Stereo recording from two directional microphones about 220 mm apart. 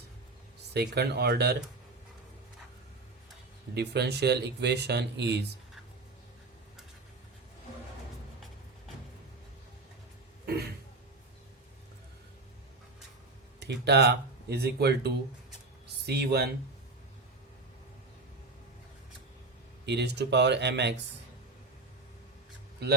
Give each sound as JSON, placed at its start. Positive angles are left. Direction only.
{"t": 0.7, "sound": "speech", "side_deg": -50}
{"t": 3.8, "sound": "speech", "side_deg": -50}
{"t": 10.4, "sound": "a sound", "side_deg": -45}
{"t": 13.6, "sound": "speech", "side_deg": -50}
{"t": 19.8, "sound": "speech", "side_deg": -50}